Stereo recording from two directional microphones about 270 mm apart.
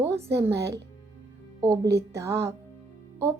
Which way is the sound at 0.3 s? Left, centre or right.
Centre.